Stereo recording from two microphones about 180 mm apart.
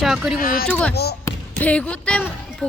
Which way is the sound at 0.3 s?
55° left (ahead or behind).